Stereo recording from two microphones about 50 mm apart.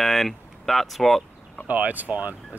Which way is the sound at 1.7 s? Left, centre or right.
Right.